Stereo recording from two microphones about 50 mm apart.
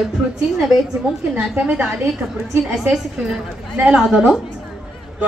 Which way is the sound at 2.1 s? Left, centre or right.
Centre.